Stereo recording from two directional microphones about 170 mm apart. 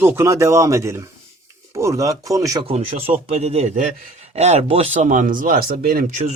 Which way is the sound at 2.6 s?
35° right (ahead or behind).